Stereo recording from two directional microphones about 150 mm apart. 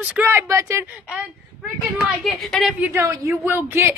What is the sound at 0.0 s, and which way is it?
Speech, 10° right (ahead or behind).